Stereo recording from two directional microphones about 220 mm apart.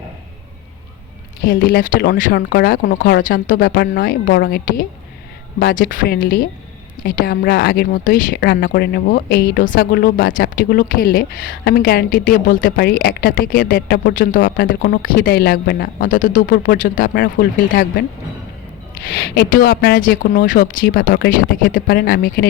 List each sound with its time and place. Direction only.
1.5 s speech: 40° left (ahead or behind)
19.1 s speech: 45° left (ahead or behind)